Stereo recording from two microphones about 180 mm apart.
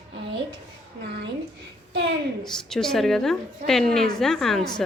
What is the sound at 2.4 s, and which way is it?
A woman's voice, 5° left (ahead or behind).